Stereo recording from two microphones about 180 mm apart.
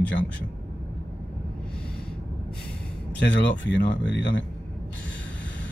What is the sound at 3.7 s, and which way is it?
Speech, 80° left.